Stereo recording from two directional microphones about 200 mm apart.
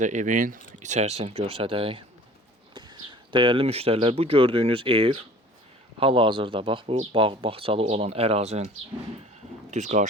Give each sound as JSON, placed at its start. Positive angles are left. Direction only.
{"t": 0.0, "sound": "speech", "side_deg": -40}
{"t": 9.6, "sound": "speech", "side_deg": -35}